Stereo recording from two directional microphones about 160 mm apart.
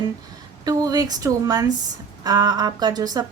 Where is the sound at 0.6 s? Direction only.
25° right (ahead or behind).